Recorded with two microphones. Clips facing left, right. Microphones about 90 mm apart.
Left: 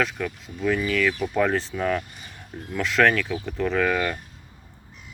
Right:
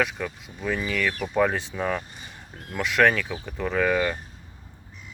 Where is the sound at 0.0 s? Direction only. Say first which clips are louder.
Left 1 dB; 15° right (ahead or behind).